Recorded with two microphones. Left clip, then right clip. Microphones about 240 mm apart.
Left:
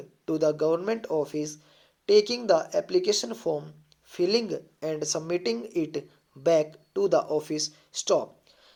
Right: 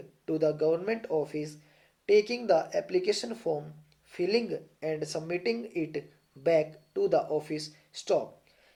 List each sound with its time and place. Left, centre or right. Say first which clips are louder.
0.3 s speech: left 3 dB; left